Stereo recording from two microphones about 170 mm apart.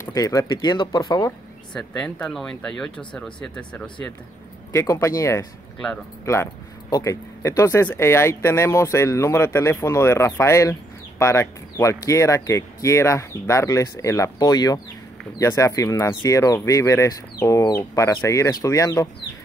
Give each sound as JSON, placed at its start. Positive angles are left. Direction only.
{"t": 0.0, "sound": "speech", "side_deg": 20}
{"t": 1.7, "sound": "speech", "side_deg": 5}
{"t": 4.7, "sound": "speech", "side_deg": 15}